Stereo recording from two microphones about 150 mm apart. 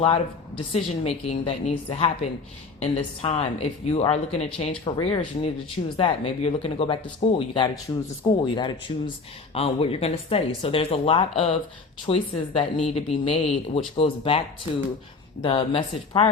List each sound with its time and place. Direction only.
0.0 s speech: 40° left (ahead or behind)